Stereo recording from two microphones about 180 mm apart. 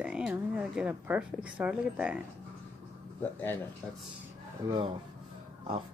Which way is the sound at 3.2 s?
10° left (ahead or behind).